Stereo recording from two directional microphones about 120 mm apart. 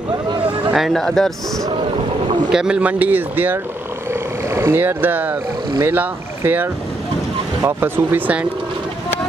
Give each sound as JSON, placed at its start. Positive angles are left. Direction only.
{"t": 0.7, "sound": "speech", "side_deg": 0}
{"t": 2.5, "sound": "speech", "side_deg": -5}